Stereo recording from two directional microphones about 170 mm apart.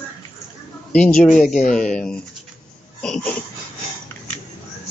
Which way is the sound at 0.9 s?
5° left (ahead or behind).